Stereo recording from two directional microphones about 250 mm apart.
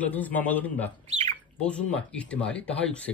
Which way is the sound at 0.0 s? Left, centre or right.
Centre.